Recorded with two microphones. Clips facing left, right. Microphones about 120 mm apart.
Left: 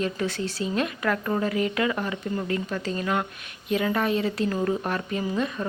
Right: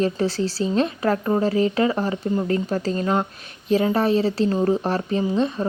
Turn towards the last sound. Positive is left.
turn(degrees=-30)  # may be behind; listen again after turning